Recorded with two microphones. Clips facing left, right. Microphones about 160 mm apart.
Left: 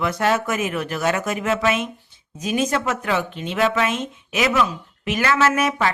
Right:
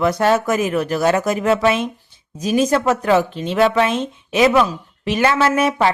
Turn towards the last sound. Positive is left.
turn(degrees=-30)  # may be behind; listen again after turning